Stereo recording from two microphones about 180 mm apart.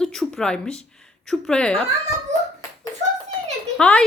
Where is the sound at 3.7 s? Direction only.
5° left (ahead or behind).